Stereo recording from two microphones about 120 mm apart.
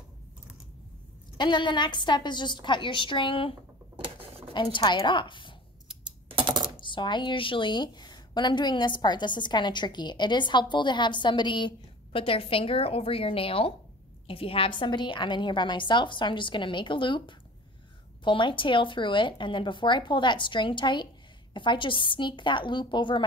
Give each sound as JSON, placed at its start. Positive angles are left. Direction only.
{"t": 1.4, "sound": "a woman's voice", "side_deg": 40}
{"t": 3.9, "sound": "a sound", "side_deg": -50}
{"t": 4.7, "sound": "a woman's voice", "side_deg": 40}
{"t": 6.2, "sound": "typing", "side_deg": -45}
{"t": 6.8, "sound": "a woman's voice", "side_deg": 40}